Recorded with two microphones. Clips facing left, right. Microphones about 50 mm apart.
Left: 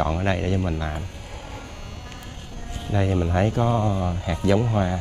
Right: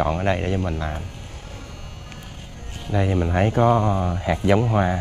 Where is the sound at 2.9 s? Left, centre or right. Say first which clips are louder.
Right 1 dB; centre.